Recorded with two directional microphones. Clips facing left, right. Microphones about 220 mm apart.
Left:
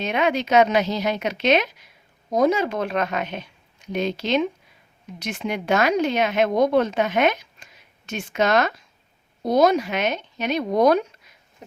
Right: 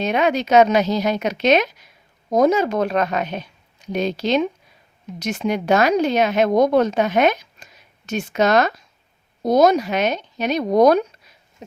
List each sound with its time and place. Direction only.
0.0 s speech: 40° right (ahead or behind)